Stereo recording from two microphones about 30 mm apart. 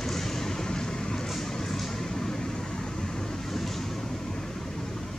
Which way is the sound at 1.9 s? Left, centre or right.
Centre.